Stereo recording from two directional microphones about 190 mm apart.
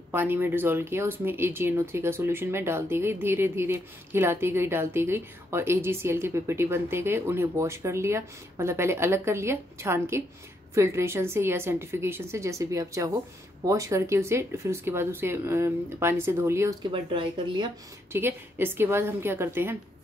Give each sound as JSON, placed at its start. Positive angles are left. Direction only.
{"t": 0.1, "sound": "speech", "side_deg": -10}
{"t": 16.9, "sound": "speech", "side_deg": -25}
{"t": 18.1, "sound": "speech", "side_deg": -10}